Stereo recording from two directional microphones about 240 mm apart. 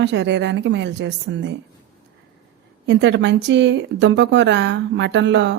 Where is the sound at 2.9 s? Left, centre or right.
Right.